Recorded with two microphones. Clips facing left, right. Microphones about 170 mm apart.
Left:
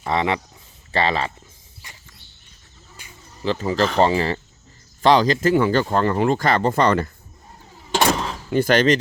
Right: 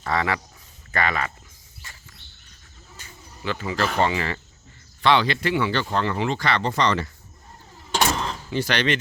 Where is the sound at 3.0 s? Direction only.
10° left (ahead or behind).